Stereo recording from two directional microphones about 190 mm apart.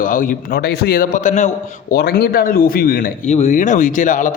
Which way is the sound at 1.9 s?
55° left (ahead or behind).